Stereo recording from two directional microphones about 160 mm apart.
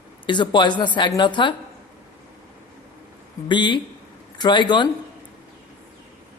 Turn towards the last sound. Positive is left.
turn(degrees=30)  # may be behind; listen again after turning